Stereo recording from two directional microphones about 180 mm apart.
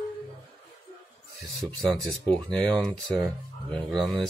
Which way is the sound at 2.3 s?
5° left (ahead or behind).